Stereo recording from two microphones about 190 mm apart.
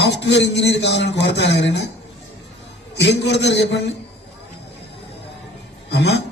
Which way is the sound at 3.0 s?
65° left (ahead or behind).